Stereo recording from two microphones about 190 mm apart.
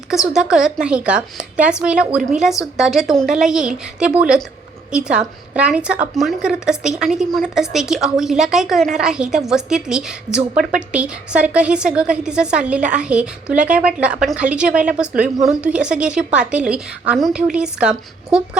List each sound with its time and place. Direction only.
0.5 s speech: 5° right (ahead or behind)